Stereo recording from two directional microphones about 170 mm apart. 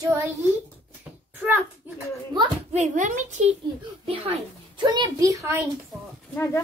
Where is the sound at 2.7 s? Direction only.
45° right (ahead or behind).